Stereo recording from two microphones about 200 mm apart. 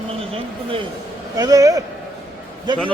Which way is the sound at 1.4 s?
20° right (ahead or behind).